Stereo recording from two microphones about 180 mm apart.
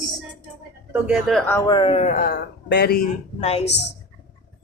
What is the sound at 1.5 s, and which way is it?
Speech, 15° left (ahead or behind).